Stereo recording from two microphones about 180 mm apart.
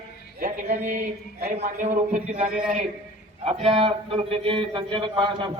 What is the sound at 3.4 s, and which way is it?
Speech, 35° right (ahead or behind).